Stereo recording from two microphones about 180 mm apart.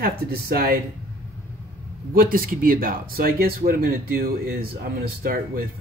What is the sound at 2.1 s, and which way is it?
Speech, 50° right (ahead or behind).